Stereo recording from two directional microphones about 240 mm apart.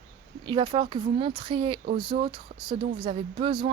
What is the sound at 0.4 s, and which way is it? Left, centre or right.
Speech, centre.